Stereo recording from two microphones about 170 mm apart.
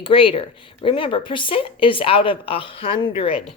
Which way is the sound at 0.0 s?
30° left (ahead or behind).